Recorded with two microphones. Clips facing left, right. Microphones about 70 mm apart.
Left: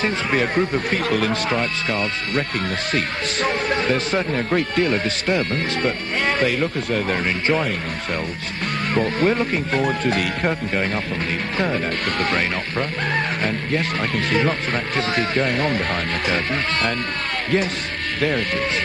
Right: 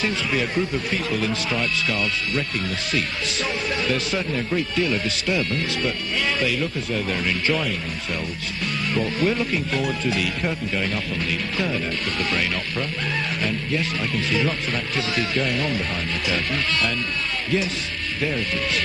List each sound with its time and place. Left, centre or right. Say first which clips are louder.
0.0 s speech: left 3 dB; left
1.5 s speech: left 2 dB; left
3.4 s speech: left 5 dB; left
9.0 s speech: left 4 dB; left